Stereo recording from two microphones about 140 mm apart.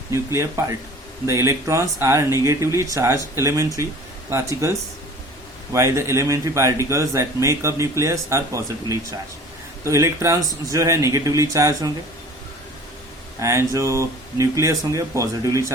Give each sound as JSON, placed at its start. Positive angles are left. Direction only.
{"t": 0.3, "sound": "speech", "side_deg": -20}
{"t": 5.7, "sound": "speech", "side_deg": -20}
{"t": 13.4, "sound": "speech", "side_deg": -20}